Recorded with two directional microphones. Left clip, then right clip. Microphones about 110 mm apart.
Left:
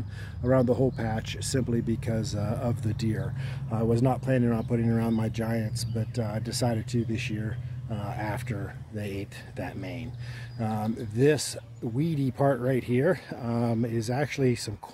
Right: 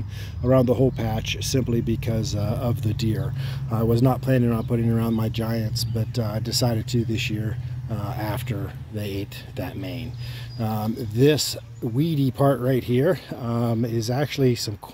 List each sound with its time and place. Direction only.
0.5 s speech: centre (ahead or behind)
3.7 s speech: 15° right (ahead or behind); by 14.7 s 10° left (ahead or behind)